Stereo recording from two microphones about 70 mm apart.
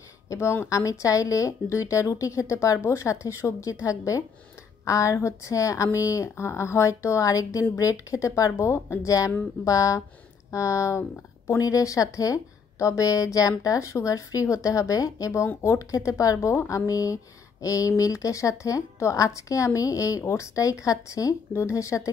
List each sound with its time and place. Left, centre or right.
0.3 s speech: left
9.7 s speech: left
11.6 s speech: left